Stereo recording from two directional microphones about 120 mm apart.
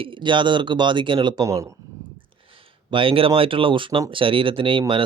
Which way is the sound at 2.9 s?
50° right (ahead or behind).